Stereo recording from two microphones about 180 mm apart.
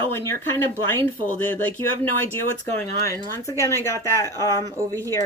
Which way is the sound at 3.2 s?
15° left (ahead or behind).